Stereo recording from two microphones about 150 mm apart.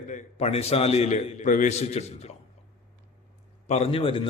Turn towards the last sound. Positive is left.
turn(degrees=35)  # may be behind; listen again after turning